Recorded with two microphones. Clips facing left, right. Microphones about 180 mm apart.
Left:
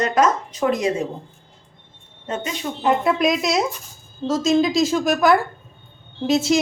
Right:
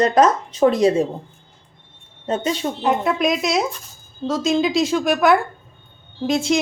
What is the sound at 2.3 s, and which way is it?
Speech, 35° right (ahead or behind).